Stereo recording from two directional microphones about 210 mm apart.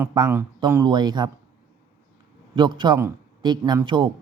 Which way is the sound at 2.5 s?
20° right (ahead or behind).